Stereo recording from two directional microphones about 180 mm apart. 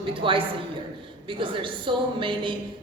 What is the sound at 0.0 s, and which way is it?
A man's voice, 30° right (ahead or behind).